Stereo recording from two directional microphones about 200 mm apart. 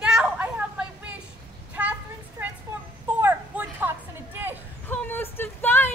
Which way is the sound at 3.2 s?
10° right (ahead or behind).